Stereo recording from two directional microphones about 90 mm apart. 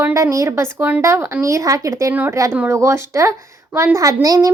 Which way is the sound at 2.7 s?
30° right (ahead or behind).